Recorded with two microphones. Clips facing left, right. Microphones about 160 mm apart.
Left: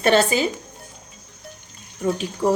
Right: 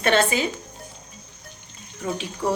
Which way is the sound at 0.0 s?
35° left (ahead or behind).